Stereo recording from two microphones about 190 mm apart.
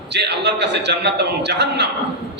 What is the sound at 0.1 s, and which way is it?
A man's voice, 60° right (ahead or behind).